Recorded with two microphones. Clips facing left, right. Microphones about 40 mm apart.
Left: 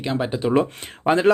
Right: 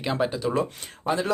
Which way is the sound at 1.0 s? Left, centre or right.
Left.